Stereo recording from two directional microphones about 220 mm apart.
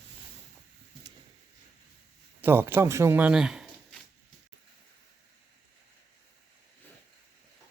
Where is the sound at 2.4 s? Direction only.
10° right (ahead or behind).